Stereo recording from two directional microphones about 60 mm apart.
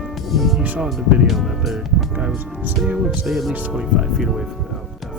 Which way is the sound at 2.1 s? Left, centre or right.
Right.